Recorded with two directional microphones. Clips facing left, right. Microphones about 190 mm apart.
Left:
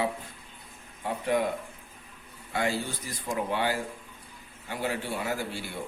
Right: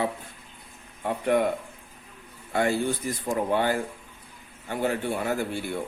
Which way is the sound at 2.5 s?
55° right (ahead or behind).